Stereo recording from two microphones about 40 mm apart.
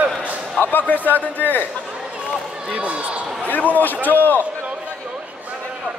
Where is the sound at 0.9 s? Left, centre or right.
Left.